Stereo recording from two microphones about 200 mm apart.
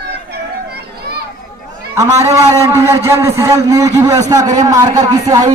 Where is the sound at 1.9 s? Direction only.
15° right (ahead or behind).